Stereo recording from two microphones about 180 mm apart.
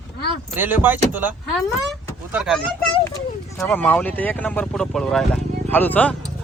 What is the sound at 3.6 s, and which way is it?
Speech, 10° left (ahead or behind).